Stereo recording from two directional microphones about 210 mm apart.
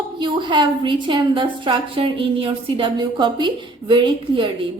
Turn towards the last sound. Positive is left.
turn(degrees=-25)  # may be behind; listen again after turning